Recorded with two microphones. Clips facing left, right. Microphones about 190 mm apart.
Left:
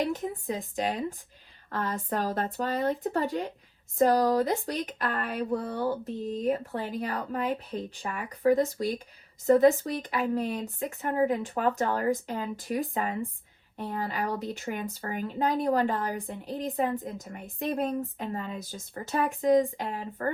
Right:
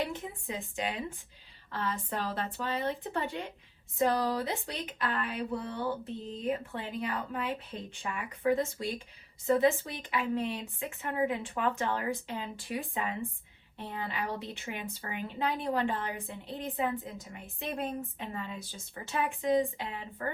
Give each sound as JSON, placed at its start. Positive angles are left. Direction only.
{"t": 0.1, "sound": "speech", "side_deg": 40}